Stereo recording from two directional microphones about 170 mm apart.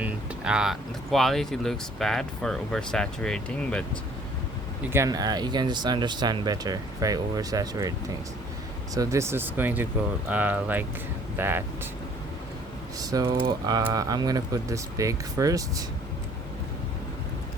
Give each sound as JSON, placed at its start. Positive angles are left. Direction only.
{"t": 0.0, "sound": "speech", "side_deg": -5}
{"t": 4.8, "sound": "speech", "side_deg": -15}
{"t": 9.0, "sound": "speech", "side_deg": -15}
{"t": 13.0, "sound": "speech", "side_deg": -20}